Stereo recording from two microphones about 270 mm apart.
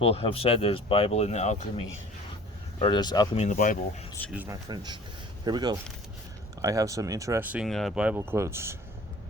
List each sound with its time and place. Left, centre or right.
0.0 s speech: left
3.5 s speech: left
4.3 s speech: centre